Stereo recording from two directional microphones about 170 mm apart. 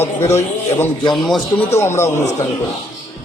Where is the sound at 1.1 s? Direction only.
Centre (ahead or behind).